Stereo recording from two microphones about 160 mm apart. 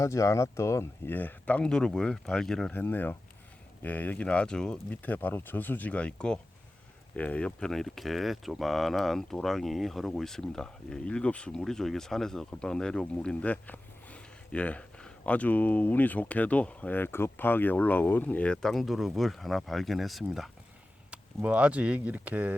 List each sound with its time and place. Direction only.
0.0 s speech: 20° left (ahead or behind); by 22.5 s 10° right (ahead or behind)